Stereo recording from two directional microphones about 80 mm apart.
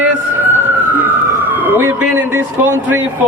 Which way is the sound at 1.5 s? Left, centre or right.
Right.